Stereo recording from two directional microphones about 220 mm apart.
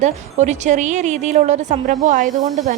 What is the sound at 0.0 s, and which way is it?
A woman's voice, 30° right (ahead or behind).